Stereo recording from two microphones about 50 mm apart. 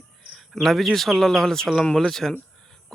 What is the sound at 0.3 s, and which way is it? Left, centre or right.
Speech, centre.